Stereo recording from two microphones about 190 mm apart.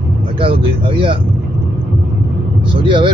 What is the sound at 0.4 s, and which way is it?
Speech, 30° right (ahead or behind).